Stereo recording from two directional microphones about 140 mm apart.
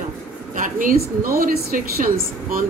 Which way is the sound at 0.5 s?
70° right (ahead or behind).